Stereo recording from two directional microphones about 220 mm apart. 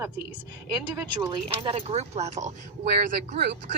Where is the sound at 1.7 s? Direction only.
30° right (ahead or behind).